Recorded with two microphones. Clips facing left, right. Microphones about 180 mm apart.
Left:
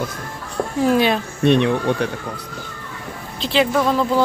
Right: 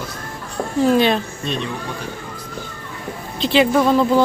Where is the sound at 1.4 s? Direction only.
65° left (ahead or behind).